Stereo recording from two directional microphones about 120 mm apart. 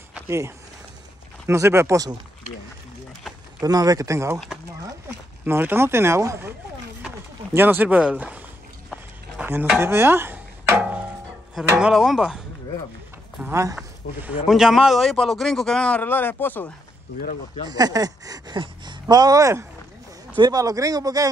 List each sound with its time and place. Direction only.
1.5 s speech: 20° right (ahead or behind)
3.6 s speech: 30° right (ahead or behind)
5.4 s speech: 15° right (ahead or behind)
7.5 s speech: 15° right (ahead or behind)
8.9 s a sound: 15° right (ahead or behind)
9.8 s music: 20° right (ahead or behind)
11.8 s a man's voice: 5° right (ahead or behind)
13.5 s speech: 25° right (ahead or behind)
14.5 s a man's voice: 5° right (ahead or behind); by 16.7 s 15° left (ahead or behind)
17.6 s a sound: 35° right (ahead or behind)
18.6 s speech: 35° right (ahead or behind)